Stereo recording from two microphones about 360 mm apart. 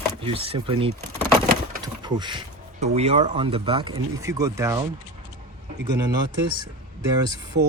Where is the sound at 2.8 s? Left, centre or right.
Centre.